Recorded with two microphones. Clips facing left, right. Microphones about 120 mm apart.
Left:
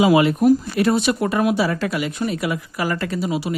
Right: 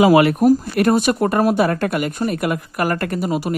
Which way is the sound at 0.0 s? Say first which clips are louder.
Right 2 dB; 60° right (ahead or behind).